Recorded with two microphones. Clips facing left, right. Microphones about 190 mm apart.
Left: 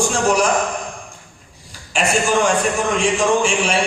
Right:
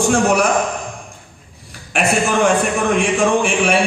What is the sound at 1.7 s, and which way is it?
A man's voice, 60° right (ahead or behind).